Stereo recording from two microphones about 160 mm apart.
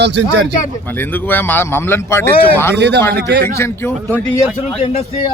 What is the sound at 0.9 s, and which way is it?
Speech, 10° left (ahead or behind).